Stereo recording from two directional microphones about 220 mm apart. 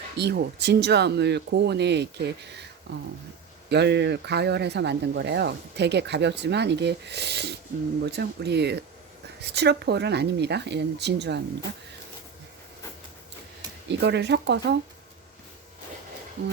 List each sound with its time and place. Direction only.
0.2 s speech: 50° right (ahead or behind)
3.7 s speech: 50° right (ahead or behind)
13.8 s speech: 50° right (ahead or behind)